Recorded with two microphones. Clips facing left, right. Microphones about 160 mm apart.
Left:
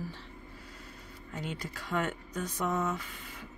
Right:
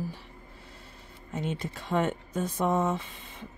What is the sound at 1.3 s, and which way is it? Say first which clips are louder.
Speech: right 6 dB; 25° right (ahead or behind).